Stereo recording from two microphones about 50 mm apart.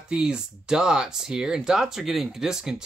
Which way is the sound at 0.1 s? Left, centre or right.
Centre.